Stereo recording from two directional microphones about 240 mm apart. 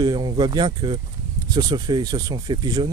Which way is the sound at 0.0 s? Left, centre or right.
Centre.